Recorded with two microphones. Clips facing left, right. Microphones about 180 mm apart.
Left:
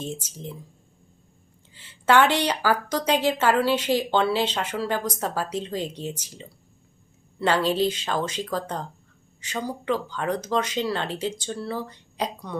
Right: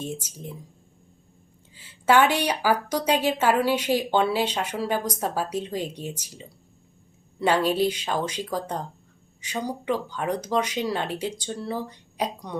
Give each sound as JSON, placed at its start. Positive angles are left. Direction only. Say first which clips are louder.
{"t": 0.0, "sound": "a woman's voice", "louder": "even", "side_deg": -10}
{"t": 1.7, "sound": "a woman's voice", "louder": "even", "side_deg": -10}